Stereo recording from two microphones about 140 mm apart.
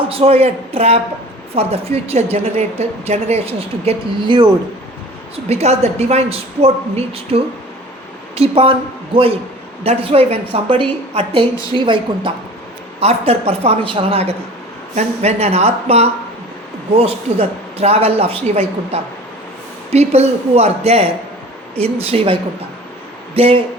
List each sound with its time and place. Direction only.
0.1 s a woman's voice: 45° right (ahead or behind)
5.5 s a woman's voice: 50° right (ahead or behind)
13.0 s a woman's voice: 45° right (ahead or behind)